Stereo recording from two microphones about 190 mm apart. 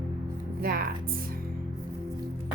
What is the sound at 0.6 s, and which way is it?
Speech, 50° right (ahead or behind).